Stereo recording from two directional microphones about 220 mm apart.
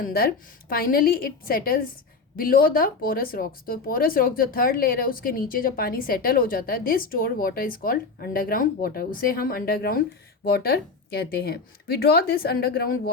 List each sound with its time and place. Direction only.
0.0 s a woman's voice: 40° left (ahead or behind)